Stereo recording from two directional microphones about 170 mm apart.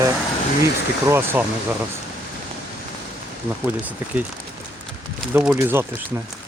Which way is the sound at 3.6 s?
10° right (ahead or behind).